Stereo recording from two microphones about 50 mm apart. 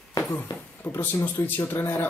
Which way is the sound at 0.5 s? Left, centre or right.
Left.